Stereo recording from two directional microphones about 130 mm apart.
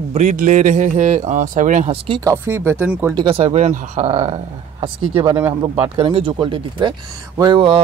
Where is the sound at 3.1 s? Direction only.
45° right (ahead or behind).